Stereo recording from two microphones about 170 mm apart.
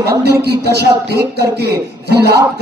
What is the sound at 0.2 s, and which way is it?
A man's voice, 70° right (ahead or behind).